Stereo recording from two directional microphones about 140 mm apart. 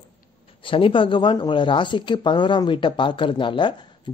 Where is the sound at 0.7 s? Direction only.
35° left (ahead or behind).